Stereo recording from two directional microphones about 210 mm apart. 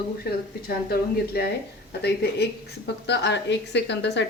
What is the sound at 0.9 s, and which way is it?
A woman's voice, 50° left (ahead or behind).